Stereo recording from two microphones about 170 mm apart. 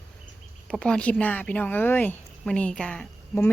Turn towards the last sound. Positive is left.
turn(degrees=10)  # may be behind; listen again after turning